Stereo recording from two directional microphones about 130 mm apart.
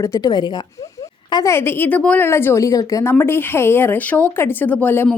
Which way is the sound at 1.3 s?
25° left (ahead or behind).